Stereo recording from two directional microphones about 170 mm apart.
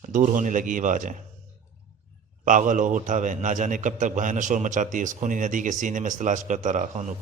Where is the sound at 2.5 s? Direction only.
50° right (ahead or behind).